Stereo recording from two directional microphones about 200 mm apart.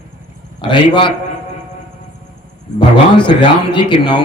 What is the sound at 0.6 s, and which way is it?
Speech, 25° left (ahead or behind).